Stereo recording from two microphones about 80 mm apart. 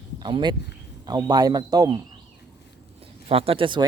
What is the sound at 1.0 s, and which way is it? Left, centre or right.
Speech, right.